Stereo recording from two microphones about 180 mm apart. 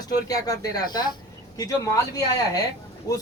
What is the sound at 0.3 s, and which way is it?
A man's voice, 20° left (ahead or behind).